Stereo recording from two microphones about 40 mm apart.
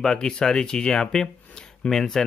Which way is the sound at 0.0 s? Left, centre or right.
Centre.